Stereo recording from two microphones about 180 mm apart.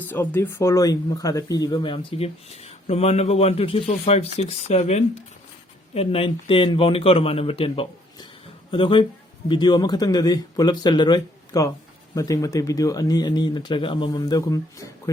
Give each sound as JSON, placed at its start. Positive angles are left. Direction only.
{"t": 0.1, "sound": "speech", "side_deg": 10}